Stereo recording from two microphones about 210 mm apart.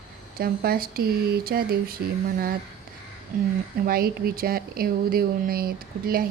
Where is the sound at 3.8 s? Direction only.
45° right (ahead or behind).